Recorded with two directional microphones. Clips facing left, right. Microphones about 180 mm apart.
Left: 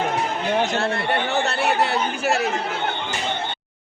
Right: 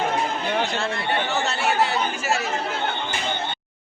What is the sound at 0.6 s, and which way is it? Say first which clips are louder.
Speech: left 3 dB; 45° left (ahead or behind).